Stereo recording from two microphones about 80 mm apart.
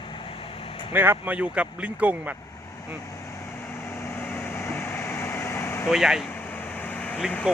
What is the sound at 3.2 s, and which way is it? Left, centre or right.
Vehicle, left.